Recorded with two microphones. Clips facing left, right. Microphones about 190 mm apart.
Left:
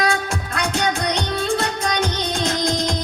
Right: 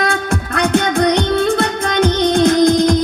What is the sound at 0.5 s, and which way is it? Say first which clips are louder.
Music: right 8 dB; 60° right (ahead or behind).